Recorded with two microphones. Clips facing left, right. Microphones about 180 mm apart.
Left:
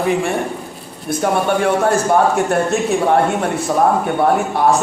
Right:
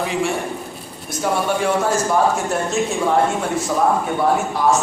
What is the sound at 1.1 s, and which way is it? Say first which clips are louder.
A man's voice: left 4 dB; 55° left (ahead or behind).